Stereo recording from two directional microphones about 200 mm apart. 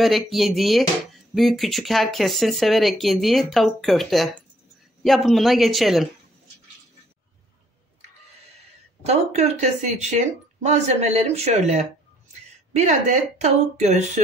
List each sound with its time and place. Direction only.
0.0 s speech: centre (ahead or behind)
9.0 s speech: 35° right (ahead or behind)